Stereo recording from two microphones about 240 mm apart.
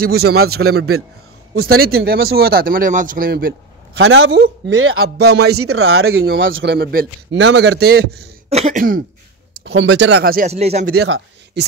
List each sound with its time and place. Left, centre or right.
0.0 s a man's voice: right
1.5 s a man's voice: right
2.0 s a man's voice: right
4.0 s speech: right
5.1 s a man's voice: right
5.6 s a man's voice: right
8.5 s cough: right
9.7 s a man's voice: right
10.9 s a man's voice: right